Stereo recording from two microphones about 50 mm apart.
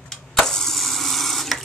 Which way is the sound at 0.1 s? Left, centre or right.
Centre.